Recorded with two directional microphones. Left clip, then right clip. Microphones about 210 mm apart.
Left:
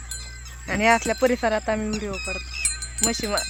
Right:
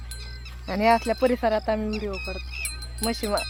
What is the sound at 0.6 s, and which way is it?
Speech, 10° left (ahead or behind).